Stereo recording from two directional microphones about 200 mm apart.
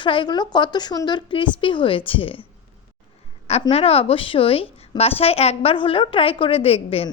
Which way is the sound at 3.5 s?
30° left (ahead or behind).